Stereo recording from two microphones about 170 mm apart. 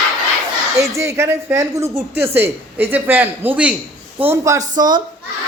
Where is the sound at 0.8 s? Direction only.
15° right (ahead or behind).